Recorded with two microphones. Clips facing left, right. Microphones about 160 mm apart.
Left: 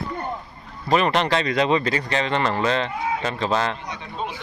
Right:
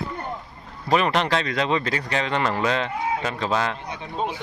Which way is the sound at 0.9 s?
5° right (ahead or behind).